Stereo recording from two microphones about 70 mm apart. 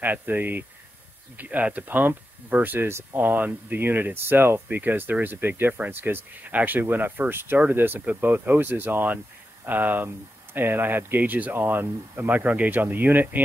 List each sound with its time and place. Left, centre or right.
0.0 s speech: right
3.3 s speech: right